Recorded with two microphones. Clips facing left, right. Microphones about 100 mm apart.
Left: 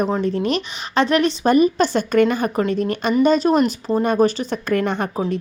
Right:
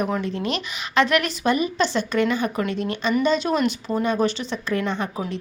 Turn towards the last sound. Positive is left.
turn(degrees=55)  # may be behind; listen again after turning